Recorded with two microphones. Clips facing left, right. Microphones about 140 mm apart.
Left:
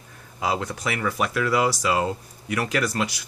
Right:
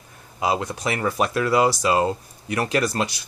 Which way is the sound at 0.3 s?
20° right (ahead or behind).